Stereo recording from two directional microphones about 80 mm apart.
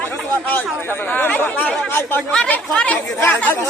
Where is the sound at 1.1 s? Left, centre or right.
Left.